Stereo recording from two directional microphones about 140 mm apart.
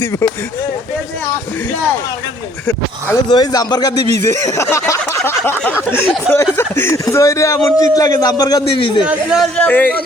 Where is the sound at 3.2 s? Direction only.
30° left (ahead or behind).